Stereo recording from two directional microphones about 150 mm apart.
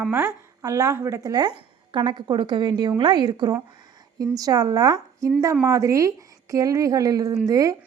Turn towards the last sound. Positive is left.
turn(degrees=-20)  # may be behind; listen again after turning